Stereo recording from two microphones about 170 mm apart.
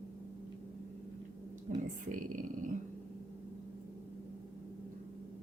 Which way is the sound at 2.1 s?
50° right (ahead or behind).